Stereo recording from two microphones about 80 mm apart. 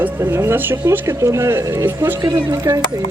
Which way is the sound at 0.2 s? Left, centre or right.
Right.